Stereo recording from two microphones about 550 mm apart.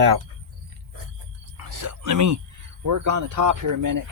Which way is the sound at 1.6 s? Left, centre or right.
Right.